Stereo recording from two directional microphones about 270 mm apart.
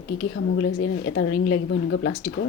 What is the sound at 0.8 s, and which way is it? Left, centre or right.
A woman's voice, left.